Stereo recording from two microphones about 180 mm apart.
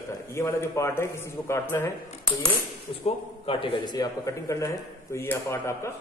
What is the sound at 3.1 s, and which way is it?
A man's voice, 30° left (ahead or behind).